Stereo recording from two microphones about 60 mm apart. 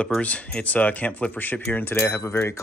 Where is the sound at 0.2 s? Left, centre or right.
Left.